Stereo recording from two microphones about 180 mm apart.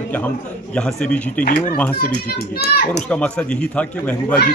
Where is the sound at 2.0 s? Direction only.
60° left (ahead or behind).